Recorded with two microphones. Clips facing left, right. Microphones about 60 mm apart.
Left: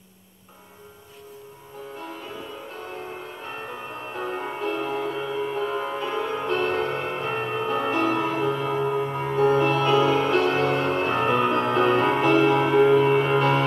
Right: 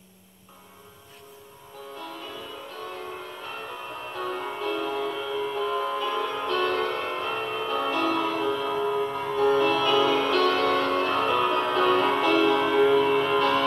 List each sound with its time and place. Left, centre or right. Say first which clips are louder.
2.0 s music: left 1 dB; left